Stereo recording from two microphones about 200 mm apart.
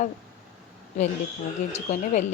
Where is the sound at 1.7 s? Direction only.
35° left (ahead or behind).